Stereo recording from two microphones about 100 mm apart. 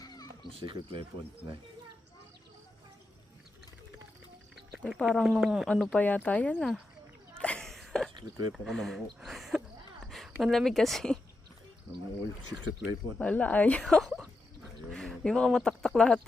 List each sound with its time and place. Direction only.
0.5 s speech: 60° right (ahead or behind)
4.8 s speech: 5° left (ahead or behind)
5.6 s speech: 10° left (ahead or behind)
7.3 s a sound: 10° left (ahead or behind)
8.1 s speech: 45° right (ahead or behind)
8.5 s a sound: centre (ahead or behind)
10.4 s speech: centre (ahead or behind)
12.5 s speech: 15° right (ahead or behind)
13.1 s speech: 15° left (ahead or behind)
13.8 s a sound: 5° left (ahead or behind)
14.9 s speech: 5° left (ahead or behind)